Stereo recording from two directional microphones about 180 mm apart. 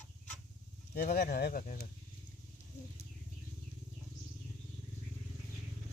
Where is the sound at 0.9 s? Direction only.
60° left (ahead or behind).